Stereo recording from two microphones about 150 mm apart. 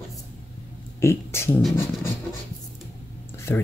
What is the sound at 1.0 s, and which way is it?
Speech, 15° left (ahead or behind).